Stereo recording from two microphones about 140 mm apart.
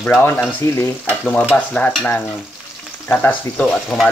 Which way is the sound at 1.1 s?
5° left (ahead or behind).